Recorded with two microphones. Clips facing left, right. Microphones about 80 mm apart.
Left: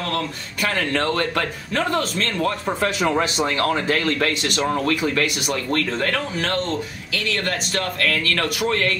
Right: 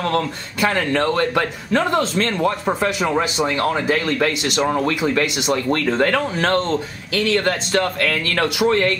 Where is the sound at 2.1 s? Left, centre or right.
Right.